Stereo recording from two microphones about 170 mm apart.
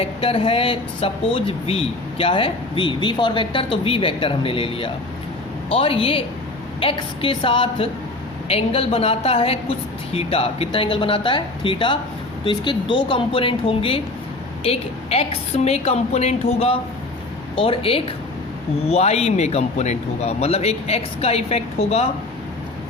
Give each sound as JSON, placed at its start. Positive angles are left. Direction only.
{"t": 0.0, "sound": "speech", "side_deg": 35}